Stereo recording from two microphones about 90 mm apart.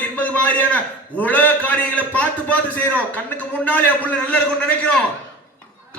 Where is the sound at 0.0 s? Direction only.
15° left (ahead or behind).